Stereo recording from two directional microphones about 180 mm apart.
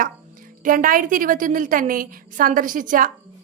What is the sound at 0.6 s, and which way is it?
A woman's voice, 50° right (ahead or behind).